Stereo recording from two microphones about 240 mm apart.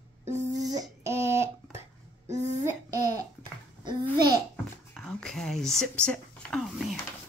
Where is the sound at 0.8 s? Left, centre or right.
Centre.